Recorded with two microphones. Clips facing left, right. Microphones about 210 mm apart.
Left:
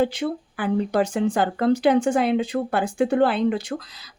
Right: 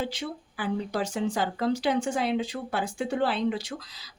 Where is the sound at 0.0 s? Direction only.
55° left (ahead or behind).